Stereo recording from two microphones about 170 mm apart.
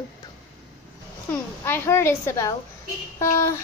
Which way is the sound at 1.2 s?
15° left (ahead or behind).